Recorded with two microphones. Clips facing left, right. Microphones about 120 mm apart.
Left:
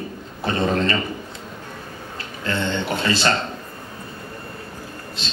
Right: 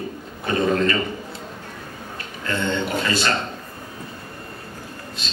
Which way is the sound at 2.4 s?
30° left (ahead or behind).